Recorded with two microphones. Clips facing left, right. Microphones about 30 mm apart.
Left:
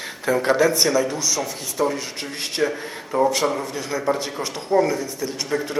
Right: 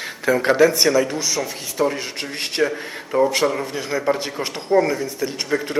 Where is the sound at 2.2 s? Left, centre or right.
Right.